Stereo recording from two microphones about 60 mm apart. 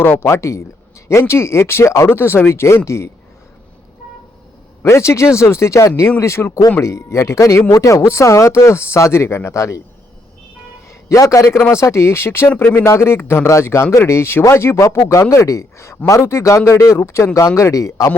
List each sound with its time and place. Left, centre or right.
0.0 s speech: left
4.8 s a man's voice: left
9.6 s a man's voice: left
11.1 s a man's voice: left
11.7 s a man's voice: left